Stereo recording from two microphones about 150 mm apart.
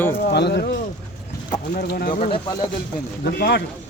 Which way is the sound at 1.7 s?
75° left (ahead or behind).